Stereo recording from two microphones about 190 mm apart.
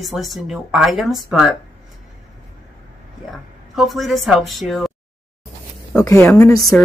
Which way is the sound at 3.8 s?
Centre (ahead or behind).